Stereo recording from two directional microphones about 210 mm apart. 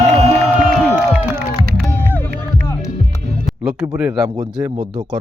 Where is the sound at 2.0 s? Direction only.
10° left (ahead or behind).